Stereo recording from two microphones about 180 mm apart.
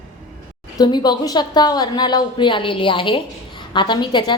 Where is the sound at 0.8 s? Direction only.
25° left (ahead or behind).